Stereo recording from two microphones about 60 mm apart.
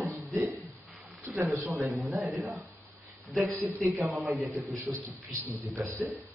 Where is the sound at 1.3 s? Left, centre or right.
Centre.